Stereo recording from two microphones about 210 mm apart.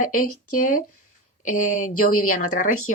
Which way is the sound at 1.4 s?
85° left.